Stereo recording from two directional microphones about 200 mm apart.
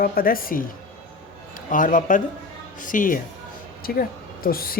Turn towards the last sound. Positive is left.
turn(degrees=45)  # may be behind; listen again after turning